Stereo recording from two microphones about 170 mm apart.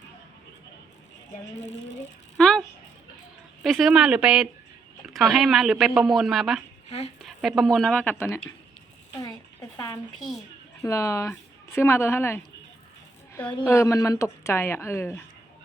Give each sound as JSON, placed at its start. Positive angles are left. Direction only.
{"t": 2.4, "sound": "a sound", "side_deg": 5}
{"t": 3.6, "sound": "speech", "side_deg": 0}
{"t": 9.1, "sound": "a sound", "side_deg": 20}
{"t": 10.2, "sound": "speech", "side_deg": 0}
{"t": 10.8, "sound": "speech", "side_deg": 20}
{"t": 13.7, "sound": "speech", "side_deg": 15}